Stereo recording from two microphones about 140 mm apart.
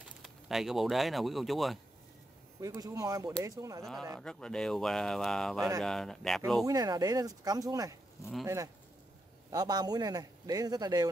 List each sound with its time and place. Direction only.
0.2 s speech: centre (ahead or behind)
2.6 s a man's voice: 25° right (ahead or behind)
3.8 s speech: centre (ahead or behind)
6.6 s a man's voice: 25° right (ahead or behind)
9.5 s a man's voice: 30° right (ahead or behind)